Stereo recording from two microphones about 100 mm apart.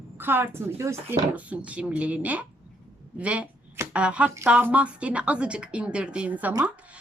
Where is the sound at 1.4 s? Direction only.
15° right (ahead or behind).